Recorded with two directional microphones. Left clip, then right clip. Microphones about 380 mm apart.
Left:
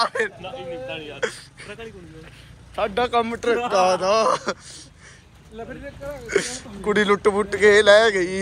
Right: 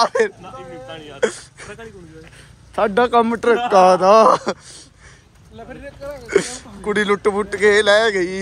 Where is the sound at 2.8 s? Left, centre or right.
Right.